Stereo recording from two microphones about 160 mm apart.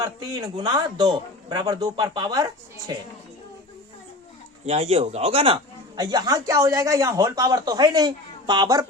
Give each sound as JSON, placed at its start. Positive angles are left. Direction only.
{"t": 0.0, "sound": "speech", "side_deg": -25}
{"t": 4.6, "sound": "speech", "side_deg": -40}
{"t": 6.0, "sound": "speech", "side_deg": -25}